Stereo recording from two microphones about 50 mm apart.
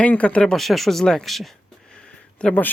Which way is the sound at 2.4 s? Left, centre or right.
Left.